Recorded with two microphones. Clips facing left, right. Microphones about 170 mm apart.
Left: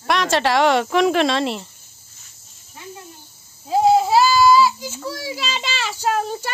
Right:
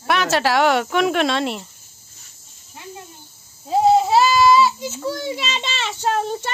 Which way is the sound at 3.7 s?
Centre (ahead or behind).